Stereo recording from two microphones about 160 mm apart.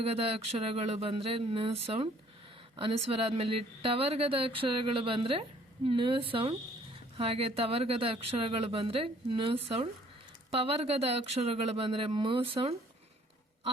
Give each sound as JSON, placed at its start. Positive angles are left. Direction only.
{"t": 0.0, "sound": "speech", "side_deg": -40}